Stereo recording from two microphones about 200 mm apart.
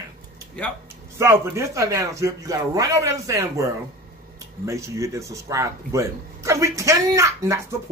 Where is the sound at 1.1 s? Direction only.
15° right (ahead or behind).